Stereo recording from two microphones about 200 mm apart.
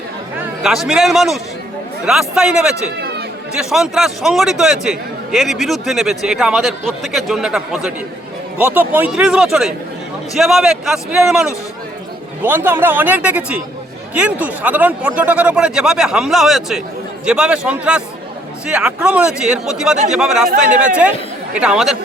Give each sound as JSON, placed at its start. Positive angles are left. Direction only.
{"t": 0.6, "sound": "a man's voice", "side_deg": 0}
{"t": 3.0, "sound": "chatter", "side_deg": -55}
{"t": 3.5, "sound": "a man's voice", "side_deg": -5}